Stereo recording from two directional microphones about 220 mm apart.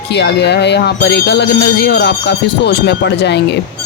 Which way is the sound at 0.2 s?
50° left (ahead or behind).